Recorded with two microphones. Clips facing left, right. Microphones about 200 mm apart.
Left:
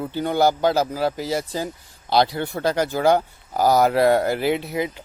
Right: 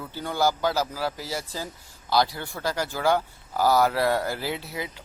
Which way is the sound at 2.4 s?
60° left (ahead or behind).